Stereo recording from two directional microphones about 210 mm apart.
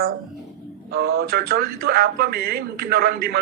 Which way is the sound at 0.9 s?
50° right (ahead or behind).